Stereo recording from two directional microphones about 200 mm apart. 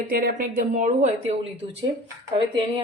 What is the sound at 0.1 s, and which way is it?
A woman's voice, 40° right (ahead or behind).